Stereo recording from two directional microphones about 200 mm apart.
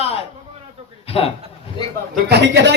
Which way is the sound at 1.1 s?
30° left (ahead or behind).